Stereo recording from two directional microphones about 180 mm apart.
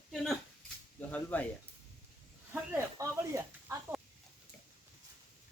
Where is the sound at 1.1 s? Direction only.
10° left (ahead or behind).